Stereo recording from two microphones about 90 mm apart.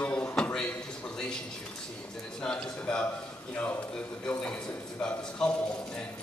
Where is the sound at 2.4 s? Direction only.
10° left (ahead or behind).